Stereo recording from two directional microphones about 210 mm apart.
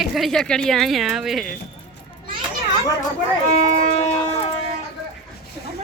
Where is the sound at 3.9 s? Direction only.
30° left (ahead or behind).